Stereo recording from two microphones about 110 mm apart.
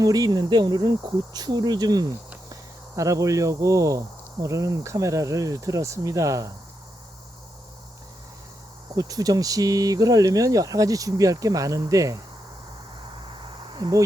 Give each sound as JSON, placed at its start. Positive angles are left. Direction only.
{"t": 0.0, "sound": "speech", "side_deg": -35}
{"t": 9.0, "sound": "speech", "side_deg": -35}
{"t": 13.7, "sound": "speech", "side_deg": -45}